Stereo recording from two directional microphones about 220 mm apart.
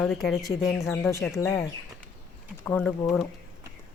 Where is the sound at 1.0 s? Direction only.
10° left (ahead or behind).